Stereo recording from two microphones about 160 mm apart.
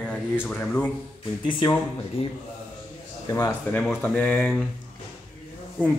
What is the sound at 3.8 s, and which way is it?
Speech, 5° left (ahead or behind).